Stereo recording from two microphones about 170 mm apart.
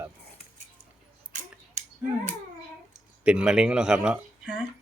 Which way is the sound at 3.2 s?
5° right (ahead or behind).